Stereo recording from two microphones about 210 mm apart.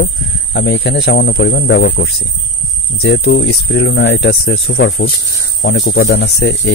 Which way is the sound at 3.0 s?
65° left (ahead or behind).